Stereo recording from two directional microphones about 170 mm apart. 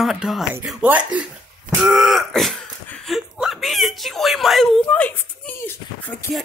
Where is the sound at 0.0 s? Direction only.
Centre (ahead or behind).